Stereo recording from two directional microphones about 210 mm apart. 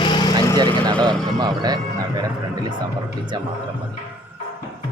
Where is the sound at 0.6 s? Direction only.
20° right (ahead or behind).